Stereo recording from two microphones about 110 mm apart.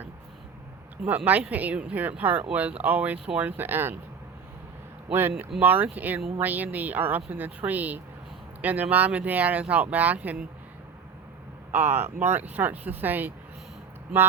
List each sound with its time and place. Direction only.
1.0 s speech: 15° right (ahead or behind)
5.5 s speech: 15° right (ahead or behind)
11.7 s speech: 20° right (ahead or behind)